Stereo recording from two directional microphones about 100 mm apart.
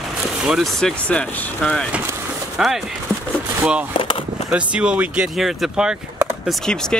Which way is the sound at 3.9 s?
60° left (ahead or behind).